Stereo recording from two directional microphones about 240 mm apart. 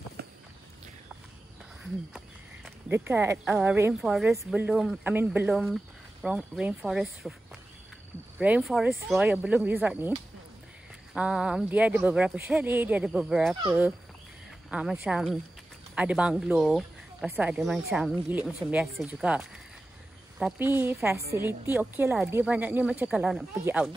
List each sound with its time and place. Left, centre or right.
0.2 s walk: right
2.1 s speech: centre
8.4 s speech: centre
11.1 s speech: centre
14.7 s speech: centre